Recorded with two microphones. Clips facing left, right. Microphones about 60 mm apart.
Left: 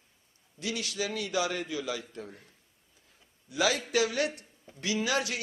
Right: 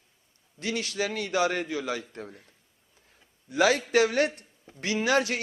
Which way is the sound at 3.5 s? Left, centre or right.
Right.